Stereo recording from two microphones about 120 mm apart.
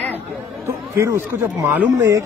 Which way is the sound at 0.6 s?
25° right (ahead or behind).